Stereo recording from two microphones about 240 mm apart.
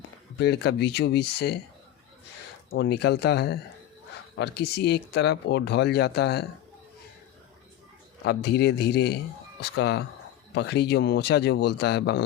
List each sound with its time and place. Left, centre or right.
0.3 s speech: left
2.7 s speech: left
8.2 s speech: left